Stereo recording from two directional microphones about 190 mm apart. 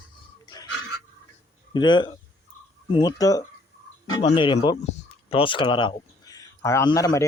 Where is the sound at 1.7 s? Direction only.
25° left (ahead or behind).